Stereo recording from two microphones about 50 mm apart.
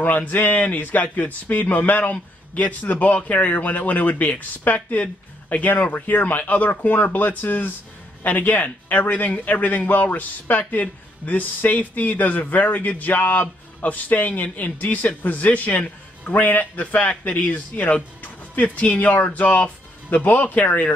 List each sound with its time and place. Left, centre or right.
0.0 s a man's voice: left